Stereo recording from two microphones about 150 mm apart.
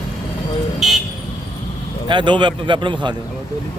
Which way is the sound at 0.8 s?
Centre (ahead or behind).